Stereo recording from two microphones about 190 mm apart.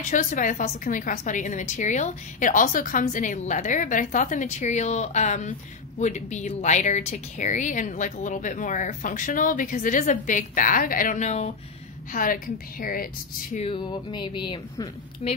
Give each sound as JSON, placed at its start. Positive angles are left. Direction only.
{"t": 0.1, "sound": "a woman's voice", "side_deg": 45}
{"t": 13.6, "sound": "a woman's voice", "side_deg": 25}